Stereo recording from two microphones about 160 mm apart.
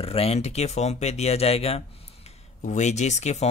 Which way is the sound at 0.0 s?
35° left (ahead or behind).